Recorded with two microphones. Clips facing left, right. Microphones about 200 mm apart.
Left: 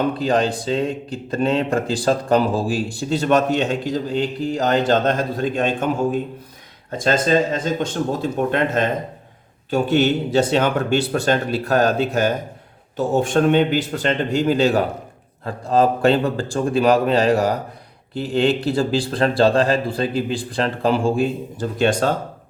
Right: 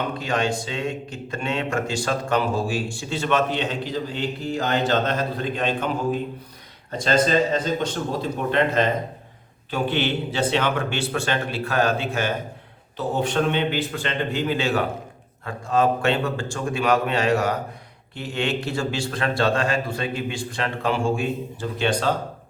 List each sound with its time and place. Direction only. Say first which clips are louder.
0.2 s a man's voice: left 5 dB; 35° left (ahead or behind)